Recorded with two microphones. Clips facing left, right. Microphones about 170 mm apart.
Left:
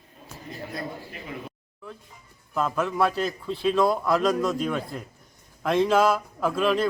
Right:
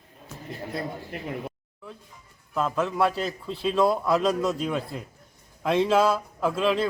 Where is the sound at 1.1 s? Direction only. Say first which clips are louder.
Right 6 dB; 65° right (ahead or behind).